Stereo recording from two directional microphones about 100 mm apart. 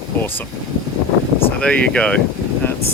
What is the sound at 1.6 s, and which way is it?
Speech, 10° left (ahead or behind).